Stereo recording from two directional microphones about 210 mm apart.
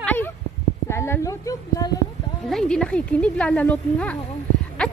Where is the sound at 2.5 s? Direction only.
5° left (ahead or behind).